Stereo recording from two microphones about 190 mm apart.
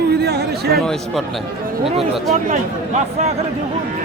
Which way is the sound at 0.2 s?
60° right (ahead or behind).